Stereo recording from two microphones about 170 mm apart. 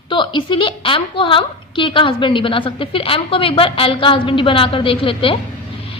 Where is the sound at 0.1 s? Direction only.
30° left (ahead or behind).